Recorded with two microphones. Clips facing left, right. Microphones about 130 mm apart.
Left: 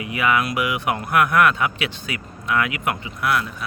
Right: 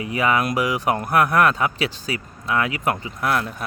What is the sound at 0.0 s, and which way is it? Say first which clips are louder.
Speech: right 1 dB; 35° right (ahead or behind).